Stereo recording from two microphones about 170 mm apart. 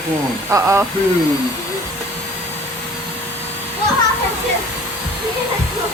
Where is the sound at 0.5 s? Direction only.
15° right (ahead or behind).